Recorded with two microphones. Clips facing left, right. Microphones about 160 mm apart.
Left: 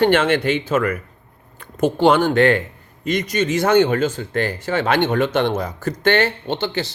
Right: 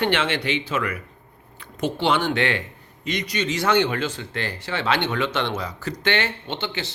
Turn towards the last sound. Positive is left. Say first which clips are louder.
# left 7 dB
turn(degrees=40)  # may be behind; listen again after turning